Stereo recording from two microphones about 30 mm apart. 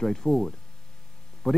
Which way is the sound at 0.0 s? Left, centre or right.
Centre.